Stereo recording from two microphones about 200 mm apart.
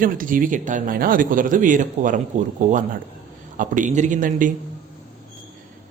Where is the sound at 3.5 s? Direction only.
40° right (ahead or behind).